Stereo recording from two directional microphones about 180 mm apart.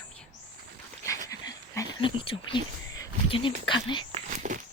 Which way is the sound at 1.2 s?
20° left (ahead or behind).